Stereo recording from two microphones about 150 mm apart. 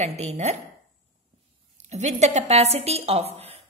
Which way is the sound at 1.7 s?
50° right (ahead or behind).